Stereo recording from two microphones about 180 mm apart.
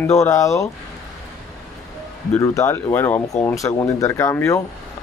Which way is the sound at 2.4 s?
20° left (ahead or behind).